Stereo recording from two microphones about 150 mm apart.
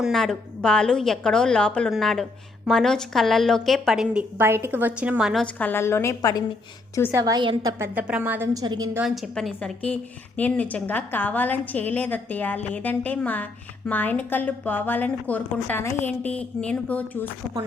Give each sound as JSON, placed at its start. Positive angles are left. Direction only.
{"t": 0.0, "sound": "a woman's voice", "side_deg": 0}
{"t": 5.5, "sound": "a woman's voice", "side_deg": 15}
{"t": 7.1, "sound": "a woman's voice", "side_deg": -20}
{"t": 7.8, "sound": "a woman's voice", "side_deg": -10}
{"t": 8.6, "sound": "a woman's voice", "side_deg": -30}
{"t": 9.0, "sound": "a woman's voice", "side_deg": 0}